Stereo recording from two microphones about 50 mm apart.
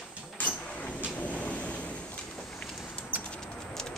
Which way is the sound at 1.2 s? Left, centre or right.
Left.